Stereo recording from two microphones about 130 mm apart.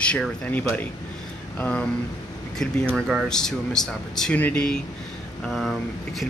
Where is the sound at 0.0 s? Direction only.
10° left (ahead or behind).